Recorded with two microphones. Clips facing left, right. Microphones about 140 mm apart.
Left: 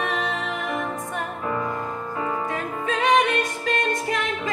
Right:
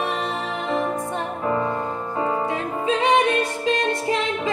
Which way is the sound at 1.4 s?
25° right (ahead or behind).